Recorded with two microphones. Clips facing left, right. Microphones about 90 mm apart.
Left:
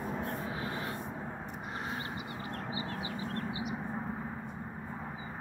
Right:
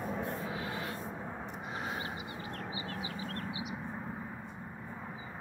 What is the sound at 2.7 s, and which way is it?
Bird, 40° left (ahead or behind).